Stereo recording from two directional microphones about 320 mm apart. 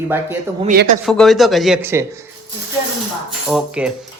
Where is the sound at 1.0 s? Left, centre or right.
Centre.